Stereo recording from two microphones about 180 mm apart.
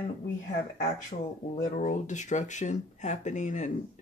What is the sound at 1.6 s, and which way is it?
Speech, 45° left (ahead or behind).